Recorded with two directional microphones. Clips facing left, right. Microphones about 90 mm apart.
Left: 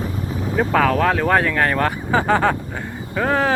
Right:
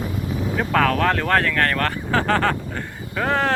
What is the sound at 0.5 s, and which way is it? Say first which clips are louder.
Speech: left 3 dB; 5° left (ahead or behind).